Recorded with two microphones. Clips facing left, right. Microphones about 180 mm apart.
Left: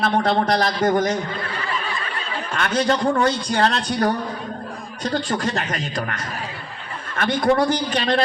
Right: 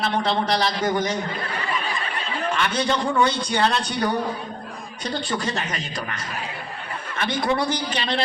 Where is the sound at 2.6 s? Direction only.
45° left (ahead or behind).